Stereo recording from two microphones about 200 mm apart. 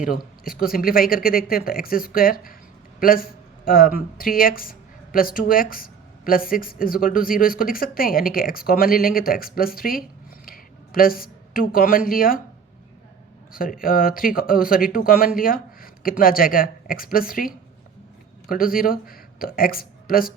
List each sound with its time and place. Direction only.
0.0 s a woman's voice: 45° left (ahead or behind)
13.5 s speech: 45° left (ahead or behind)